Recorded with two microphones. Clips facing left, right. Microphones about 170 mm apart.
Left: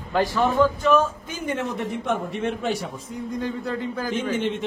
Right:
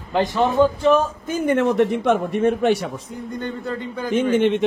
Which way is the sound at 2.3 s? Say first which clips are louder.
Right 8 dB; 60° right (ahead or behind).